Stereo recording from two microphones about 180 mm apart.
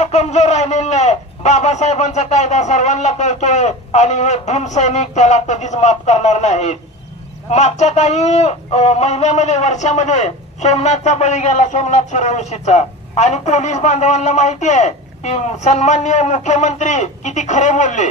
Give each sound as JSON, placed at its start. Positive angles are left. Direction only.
{"t": 0.0, "sound": "speech", "side_deg": 40}